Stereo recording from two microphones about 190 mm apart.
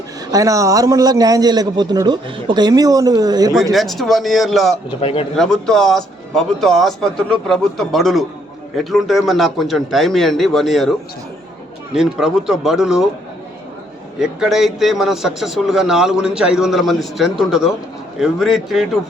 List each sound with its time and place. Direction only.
0.3 s a man's voice: 15° right (ahead or behind)
3.7 s a man's voice: centre (ahead or behind)
4.9 s speech: 30° left (ahead or behind)
5.4 s a man's voice: centre (ahead or behind)
11.9 s a man's voice: 5° right (ahead or behind)
14.2 s a man's voice: 5° right (ahead or behind)